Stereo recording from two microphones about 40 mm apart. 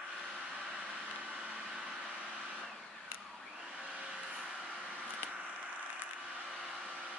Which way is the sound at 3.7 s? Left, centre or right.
Right.